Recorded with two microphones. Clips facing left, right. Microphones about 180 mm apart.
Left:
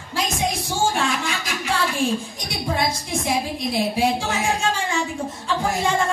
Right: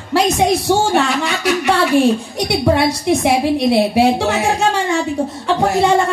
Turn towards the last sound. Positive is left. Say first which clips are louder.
# right 8 dB
turn(degrees=-70)  # may be behind; listen again after turning